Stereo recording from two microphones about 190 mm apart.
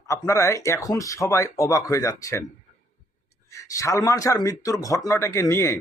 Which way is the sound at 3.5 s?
15° left (ahead or behind).